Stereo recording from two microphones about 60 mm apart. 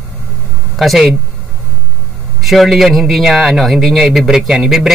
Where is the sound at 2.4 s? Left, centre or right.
Centre.